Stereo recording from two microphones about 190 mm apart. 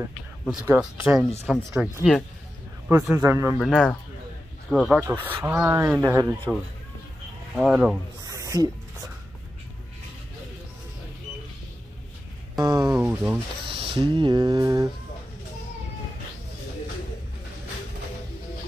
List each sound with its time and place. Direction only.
0.5 s speech: 5° right (ahead or behind)
2.9 s speech: 10° right (ahead or behind)
3.5 s speech: centre (ahead or behind); by 6.3 s 15° right (ahead or behind)
7.5 s speech: 5° right (ahead or behind)
8.3 s a sound: 15° right (ahead or behind)
12.5 s speech: 20° right (ahead or behind)
13.7 s speech: 25° right (ahead or behind)